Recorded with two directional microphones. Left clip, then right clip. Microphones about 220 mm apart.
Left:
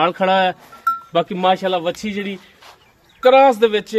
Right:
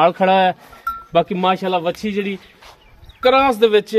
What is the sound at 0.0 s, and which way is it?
A man's voice, 15° right (ahead or behind).